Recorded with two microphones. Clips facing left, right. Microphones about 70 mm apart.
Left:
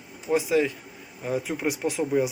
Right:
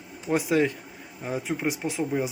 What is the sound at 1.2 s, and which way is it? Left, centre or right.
Speech, right.